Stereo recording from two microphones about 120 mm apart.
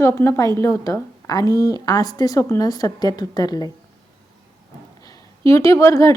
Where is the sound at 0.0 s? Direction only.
20° left (ahead or behind).